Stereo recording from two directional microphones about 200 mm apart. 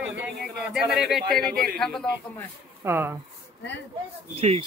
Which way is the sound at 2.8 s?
10° right (ahead or behind).